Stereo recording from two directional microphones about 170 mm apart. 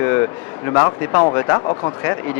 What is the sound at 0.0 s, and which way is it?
Speech, 15° left (ahead or behind).